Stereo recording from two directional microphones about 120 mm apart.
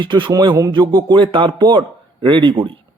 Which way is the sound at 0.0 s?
40° right (ahead or behind).